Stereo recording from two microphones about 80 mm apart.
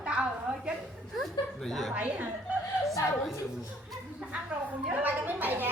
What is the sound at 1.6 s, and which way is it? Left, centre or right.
Speech, centre.